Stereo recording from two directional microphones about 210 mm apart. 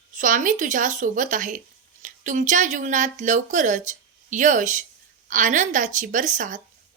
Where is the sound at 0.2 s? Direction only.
40° right (ahead or behind).